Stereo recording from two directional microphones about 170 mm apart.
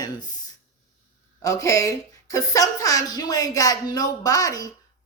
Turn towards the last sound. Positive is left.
turn(degrees=20)  # may be behind; listen again after turning